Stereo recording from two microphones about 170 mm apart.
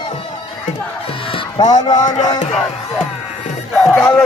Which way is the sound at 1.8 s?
20° left (ahead or behind).